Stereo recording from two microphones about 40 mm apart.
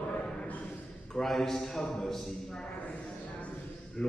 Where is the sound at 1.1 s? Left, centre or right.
Centre.